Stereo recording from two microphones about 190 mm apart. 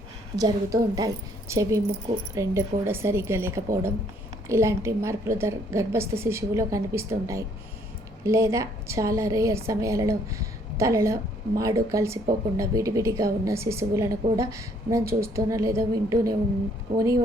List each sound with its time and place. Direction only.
0.3 s a woman's voice: 20° right (ahead or behind)